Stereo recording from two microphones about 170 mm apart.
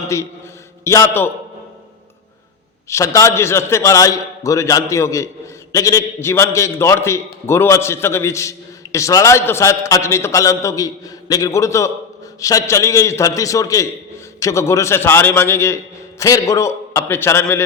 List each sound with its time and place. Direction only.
0.1 s a man's voice: 15° left (ahead or behind)
2.9 s a man's voice: 20° left (ahead or behind)